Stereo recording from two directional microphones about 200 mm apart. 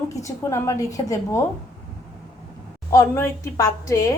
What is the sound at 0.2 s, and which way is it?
A woman's voice, 15° left (ahead or behind).